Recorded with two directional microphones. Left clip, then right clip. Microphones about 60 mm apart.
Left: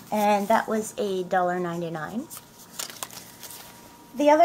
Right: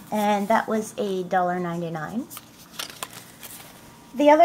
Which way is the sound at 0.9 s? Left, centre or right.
Centre.